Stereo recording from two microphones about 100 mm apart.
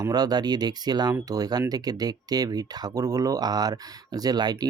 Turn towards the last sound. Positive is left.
turn(degrees=-40)  # may be behind; listen again after turning